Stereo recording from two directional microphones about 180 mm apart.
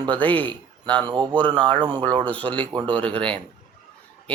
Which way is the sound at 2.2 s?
10° left (ahead or behind).